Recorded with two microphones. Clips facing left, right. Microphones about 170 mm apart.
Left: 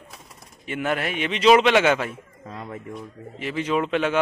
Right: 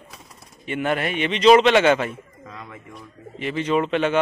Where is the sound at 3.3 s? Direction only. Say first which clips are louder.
Right 2 dB; 5° left (ahead or behind).